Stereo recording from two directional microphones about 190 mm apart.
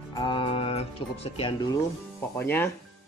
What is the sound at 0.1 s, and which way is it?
Music, 20° left (ahead or behind).